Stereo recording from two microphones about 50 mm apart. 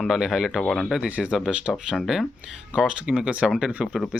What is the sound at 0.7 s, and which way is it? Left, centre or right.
Speech, centre.